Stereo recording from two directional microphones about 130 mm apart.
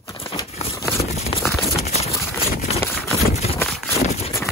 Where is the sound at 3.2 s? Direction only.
60° left (ahead or behind).